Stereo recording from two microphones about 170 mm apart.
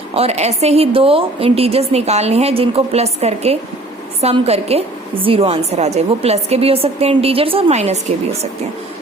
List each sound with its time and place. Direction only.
0.1 s a woman's voice: 35° right (ahead or behind)